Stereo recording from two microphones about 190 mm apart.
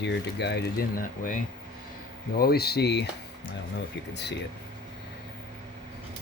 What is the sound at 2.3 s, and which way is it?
Speech, 55° left (ahead or behind).